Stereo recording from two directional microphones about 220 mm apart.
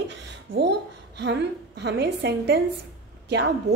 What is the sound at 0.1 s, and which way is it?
A woman's voice, 50° right (ahead or behind).